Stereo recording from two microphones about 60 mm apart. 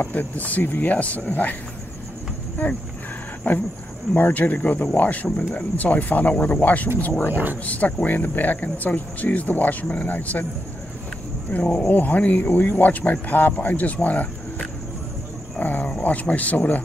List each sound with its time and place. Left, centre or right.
0.0 s speech: left
2.6 s speech: left
4.1 s speech: left
11.5 s speech: left
15.6 s cricket: left
16.0 s speech: left